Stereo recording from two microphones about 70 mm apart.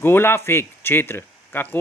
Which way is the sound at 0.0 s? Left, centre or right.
Left.